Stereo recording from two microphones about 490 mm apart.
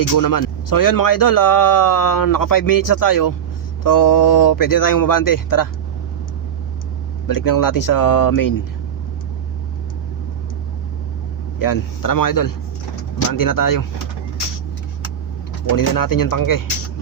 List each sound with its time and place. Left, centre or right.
0.0 s speech: left
7.3 s speech: left
11.6 s speech: left
15.7 s speech: left